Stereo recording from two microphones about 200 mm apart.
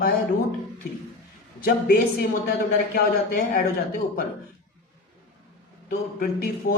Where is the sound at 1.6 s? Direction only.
45° left (ahead or behind).